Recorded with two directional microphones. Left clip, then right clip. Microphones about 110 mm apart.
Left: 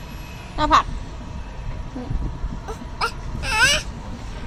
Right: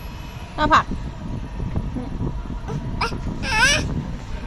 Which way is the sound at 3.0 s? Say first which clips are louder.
Left 1 dB; 25° right (ahead or behind).